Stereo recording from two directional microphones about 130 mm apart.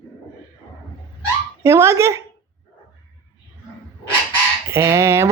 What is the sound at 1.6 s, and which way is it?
Speech, 20° right (ahead or behind).